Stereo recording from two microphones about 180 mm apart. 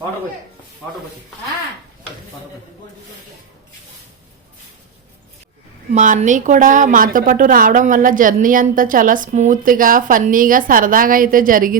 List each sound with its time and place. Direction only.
5.9 s a woman's voice: 40° right (ahead or behind)